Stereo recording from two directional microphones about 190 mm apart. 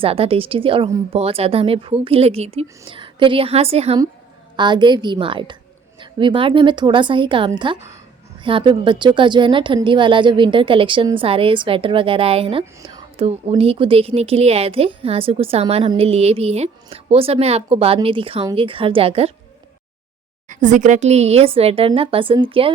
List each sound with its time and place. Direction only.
0.0 s a woman's voice: 30° right (ahead or behind)
20.5 s a woman's voice: 40° right (ahead or behind)